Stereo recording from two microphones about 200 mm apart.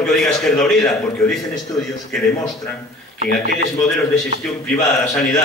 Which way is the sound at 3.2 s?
55° left (ahead or behind).